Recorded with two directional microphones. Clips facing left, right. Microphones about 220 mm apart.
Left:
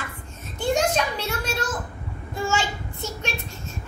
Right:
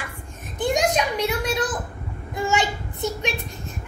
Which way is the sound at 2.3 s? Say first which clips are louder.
Right 3 dB; 20° right (ahead or behind).